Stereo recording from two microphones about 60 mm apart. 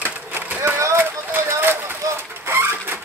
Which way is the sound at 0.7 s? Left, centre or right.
Right.